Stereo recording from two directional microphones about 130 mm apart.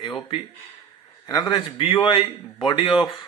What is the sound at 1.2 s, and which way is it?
A man's voice, 35° left (ahead or behind).